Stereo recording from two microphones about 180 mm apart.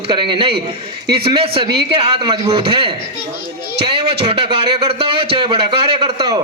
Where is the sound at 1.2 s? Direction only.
30° right (ahead or behind).